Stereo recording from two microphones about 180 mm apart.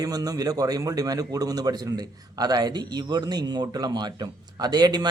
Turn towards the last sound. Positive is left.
turn(degrees=-20)  # may be behind; listen again after turning